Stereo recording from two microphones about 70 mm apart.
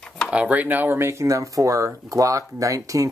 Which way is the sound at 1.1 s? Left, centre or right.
Right.